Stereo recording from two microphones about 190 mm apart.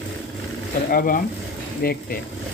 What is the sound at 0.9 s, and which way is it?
Speech, 50° left (ahead or behind).